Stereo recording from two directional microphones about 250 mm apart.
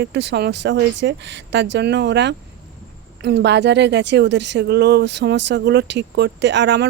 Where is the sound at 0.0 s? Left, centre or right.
Right.